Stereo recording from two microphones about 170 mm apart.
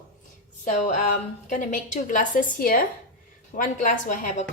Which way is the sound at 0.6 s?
45° left (ahead or behind).